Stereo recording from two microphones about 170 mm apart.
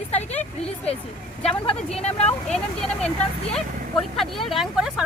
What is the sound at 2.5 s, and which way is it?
Speech, 5° left (ahead or behind).